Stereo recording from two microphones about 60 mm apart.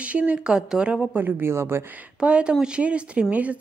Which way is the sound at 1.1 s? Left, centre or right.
Right.